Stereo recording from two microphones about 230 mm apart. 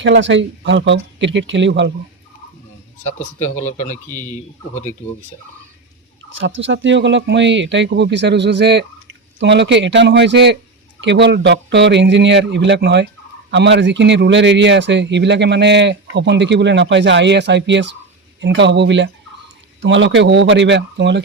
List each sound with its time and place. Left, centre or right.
0.0 s a man's voice: right
3.3 s a man's voice: left
6.6 s a man's voice: right